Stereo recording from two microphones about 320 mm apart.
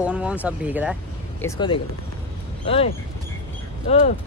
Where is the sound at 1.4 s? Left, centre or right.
Centre.